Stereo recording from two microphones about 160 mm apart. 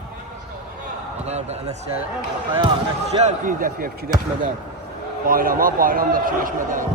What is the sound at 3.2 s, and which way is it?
Speech, 50° right (ahead or behind).